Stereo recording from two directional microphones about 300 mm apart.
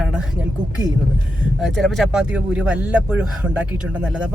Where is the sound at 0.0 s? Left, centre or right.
Centre.